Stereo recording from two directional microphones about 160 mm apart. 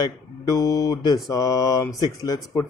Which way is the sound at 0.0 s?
20° left (ahead or behind).